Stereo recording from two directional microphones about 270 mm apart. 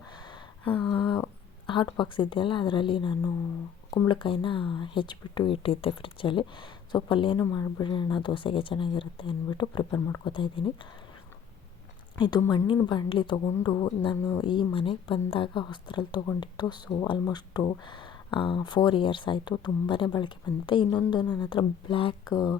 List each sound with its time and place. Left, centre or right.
0.6 s a woman's voice: centre
12.2 s a woman's voice: centre